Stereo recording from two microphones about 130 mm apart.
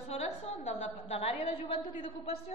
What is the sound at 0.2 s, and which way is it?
A woman's voice, 55° left (ahead or behind).